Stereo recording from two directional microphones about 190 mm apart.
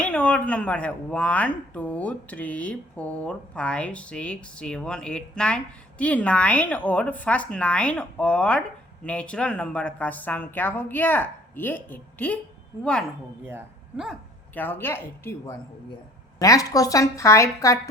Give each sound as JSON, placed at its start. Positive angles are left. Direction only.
{"t": 0.0, "sound": "a woman's voice", "side_deg": 5}
{"t": 13.4, "sound": "speech", "side_deg": -10}
{"t": 14.5, "sound": "speech", "side_deg": 10}